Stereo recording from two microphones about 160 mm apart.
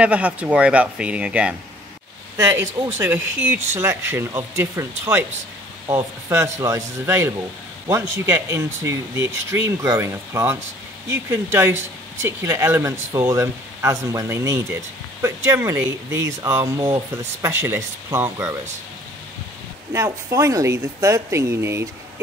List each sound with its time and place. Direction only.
0.0 s speech: 10° right (ahead or behind)
19.9 s speech: 20° right (ahead or behind)